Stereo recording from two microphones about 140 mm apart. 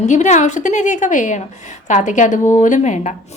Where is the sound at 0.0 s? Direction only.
55° left (ahead or behind).